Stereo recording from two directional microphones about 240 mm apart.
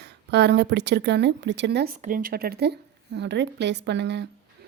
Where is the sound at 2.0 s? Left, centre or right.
Right.